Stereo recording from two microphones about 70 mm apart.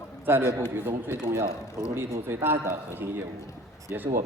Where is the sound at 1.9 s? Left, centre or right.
Right.